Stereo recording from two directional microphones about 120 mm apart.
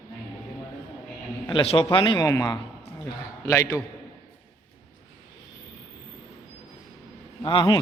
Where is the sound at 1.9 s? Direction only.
45° left (ahead or behind).